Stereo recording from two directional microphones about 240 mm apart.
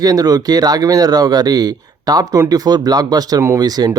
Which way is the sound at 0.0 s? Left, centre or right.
Centre.